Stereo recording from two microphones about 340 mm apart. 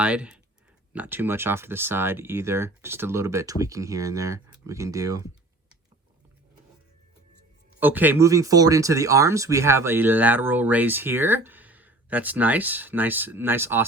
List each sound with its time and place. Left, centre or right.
0.0 s speech: centre
7.8 s speech: centre